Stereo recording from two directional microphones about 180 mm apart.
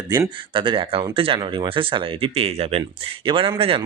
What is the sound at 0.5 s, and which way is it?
Speech, 25° right (ahead or behind).